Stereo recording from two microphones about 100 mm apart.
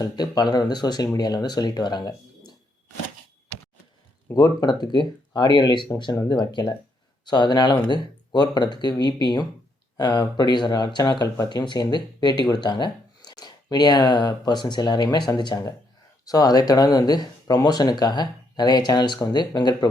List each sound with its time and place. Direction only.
0.0 s speech: 40° left (ahead or behind)
4.4 s speech: 45° left (ahead or behind)